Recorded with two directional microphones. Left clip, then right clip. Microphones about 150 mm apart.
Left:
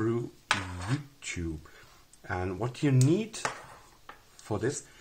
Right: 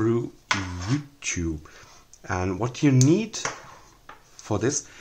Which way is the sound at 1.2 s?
25° right (ahead or behind).